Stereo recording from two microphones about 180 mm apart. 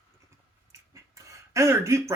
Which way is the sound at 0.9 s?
15° right (ahead or behind).